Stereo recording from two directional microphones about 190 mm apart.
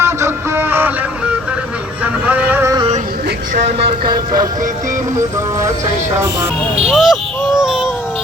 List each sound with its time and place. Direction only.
0.0 s music: 10° right (ahead or behind)
2.2 s a sound: 10° right (ahead or behind)
3.5 s speech: 30° right (ahead or behind)
6.9 s speech: centre (ahead or behind)
7.6 s baby cry: 5° right (ahead or behind)